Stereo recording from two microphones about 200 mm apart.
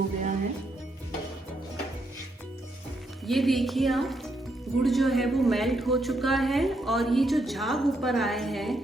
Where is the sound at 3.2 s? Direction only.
Centre (ahead or behind).